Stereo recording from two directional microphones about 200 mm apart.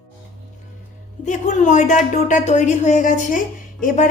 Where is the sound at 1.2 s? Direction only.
35° left (ahead or behind).